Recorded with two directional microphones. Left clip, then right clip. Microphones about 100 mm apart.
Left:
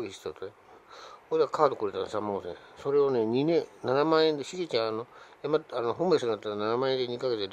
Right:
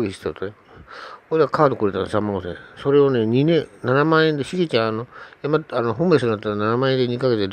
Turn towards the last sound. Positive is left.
turn(degrees=-25)  # may be behind; listen again after turning